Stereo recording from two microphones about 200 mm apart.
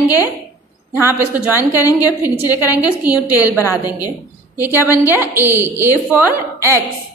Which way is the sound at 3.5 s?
15° left (ahead or behind).